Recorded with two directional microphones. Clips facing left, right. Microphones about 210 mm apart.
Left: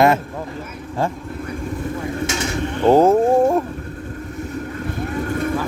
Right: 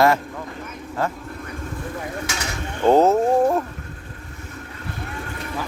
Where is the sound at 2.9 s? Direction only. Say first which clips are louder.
Left 3 dB; 10° left (ahead or behind).